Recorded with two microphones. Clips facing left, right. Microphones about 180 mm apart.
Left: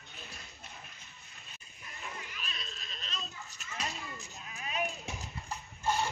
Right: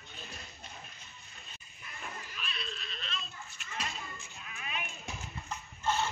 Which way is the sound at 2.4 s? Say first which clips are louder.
Right 3 dB; 40° left (ahead or behind).